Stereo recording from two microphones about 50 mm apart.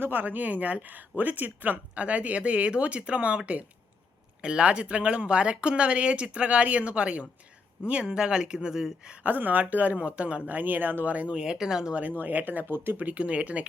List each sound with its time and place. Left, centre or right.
0.0 s speech: right; by 9.1 s centre
9.2 s speech: right
10.5 s speech: right
11.3 s speech: centre
11.9 s speech: right
12.6 s speech: right
13.1 s speech: right